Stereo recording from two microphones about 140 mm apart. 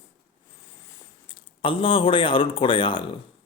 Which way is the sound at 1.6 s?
40° left (ahead or behind).